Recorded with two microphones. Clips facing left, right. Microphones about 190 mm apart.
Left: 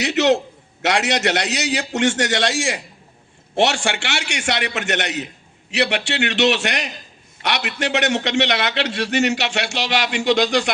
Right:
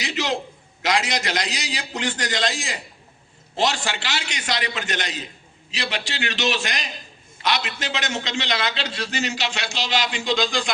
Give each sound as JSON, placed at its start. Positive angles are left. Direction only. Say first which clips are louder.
{"t": 0.0, "sound": "a man's voice", "louder": "left 9 dB", "side_deg": 70}